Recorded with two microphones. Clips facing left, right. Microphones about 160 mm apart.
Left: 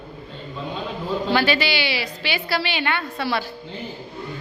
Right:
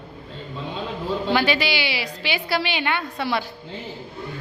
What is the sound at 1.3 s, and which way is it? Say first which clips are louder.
A woman's voice: left 1 dB; 15° right (ahead or behind).